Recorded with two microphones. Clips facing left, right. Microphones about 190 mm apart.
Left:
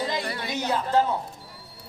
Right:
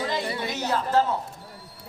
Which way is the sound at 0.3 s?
20° right (ahead or behind).